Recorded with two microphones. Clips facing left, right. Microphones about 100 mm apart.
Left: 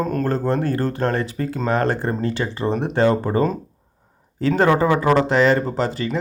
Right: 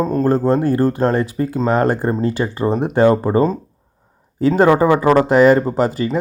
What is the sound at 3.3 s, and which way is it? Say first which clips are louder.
Speech: right 4 dB; 35° right (ahead or behind).